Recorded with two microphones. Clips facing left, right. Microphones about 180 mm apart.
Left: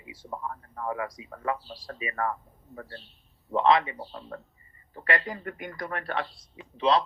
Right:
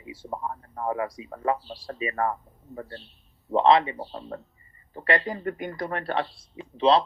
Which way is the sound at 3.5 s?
30° right (ahead or behind).